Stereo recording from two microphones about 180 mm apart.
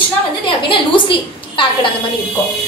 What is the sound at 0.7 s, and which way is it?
A woman's voice, 30° left (ahead or behind).